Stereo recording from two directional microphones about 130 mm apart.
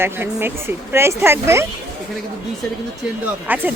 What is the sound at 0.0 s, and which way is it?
Speech, 15° right (ahead or behind).